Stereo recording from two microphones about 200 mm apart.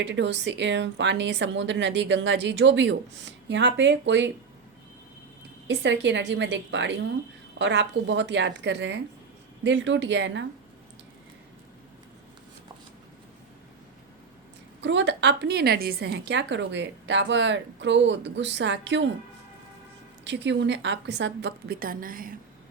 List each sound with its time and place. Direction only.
0.0 s a woman's voice: 60° right (ahead or behind)
5.6 s a woman's voice: 65° right (ahead or behind)
14.8 s a woman's voice: 60° right (ahead or behind)
20.2 s a woman's voice: 60° right (ahead or behind); by 22.4 s 45° right (ahead or behind)